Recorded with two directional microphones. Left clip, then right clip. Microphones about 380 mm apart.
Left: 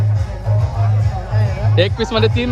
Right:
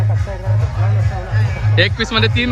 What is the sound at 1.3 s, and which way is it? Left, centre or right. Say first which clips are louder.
Speech: right 1 dB; centre.